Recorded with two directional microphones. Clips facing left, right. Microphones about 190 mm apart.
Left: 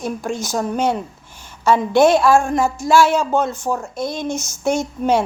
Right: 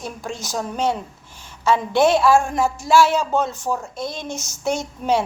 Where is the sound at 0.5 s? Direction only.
50° left (ahead or behind).